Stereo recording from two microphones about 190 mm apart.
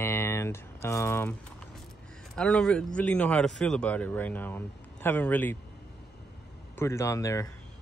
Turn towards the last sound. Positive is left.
turn(degrees=15)  # may be behind; listen again after turning